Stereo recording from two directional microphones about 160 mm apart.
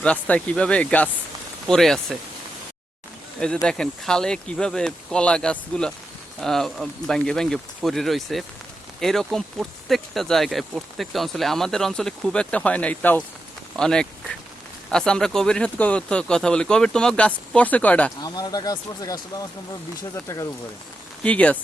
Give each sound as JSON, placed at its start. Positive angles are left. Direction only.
{"t": 0.0, "sound": "speech", "side_deg": 10}
{"t": 3.4, "sound": "speech", "side_deg": 5}
{"t": 18.2, "sound": "speech", "side_deg": 25}